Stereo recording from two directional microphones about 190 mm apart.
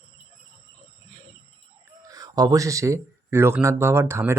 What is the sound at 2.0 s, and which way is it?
Speech, 20° right (ahead or behind).